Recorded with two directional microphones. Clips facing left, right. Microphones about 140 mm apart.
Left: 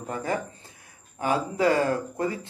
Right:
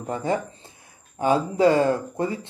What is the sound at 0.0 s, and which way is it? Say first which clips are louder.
Speech: right 4 dB; 25° right (ahead or behind).